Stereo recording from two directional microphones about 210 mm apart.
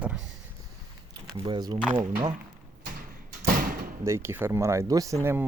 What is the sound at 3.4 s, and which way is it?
Door, 45° right (ahead or behind).